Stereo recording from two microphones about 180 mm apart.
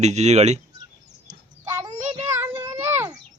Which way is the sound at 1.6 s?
15° right (ahead or behind).